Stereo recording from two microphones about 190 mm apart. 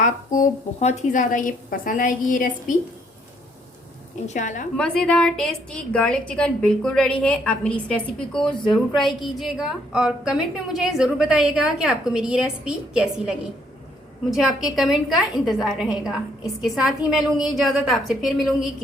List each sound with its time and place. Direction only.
0.0 s a woman's voice: 45° left (ahead or behind)
4.3 s a woman's voice: 40° left (ahead or behind)
4.8 s a woman's voice: 5° left (ahead or behind)